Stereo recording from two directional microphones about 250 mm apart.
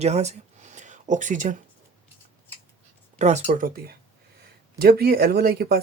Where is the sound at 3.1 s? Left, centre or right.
Right.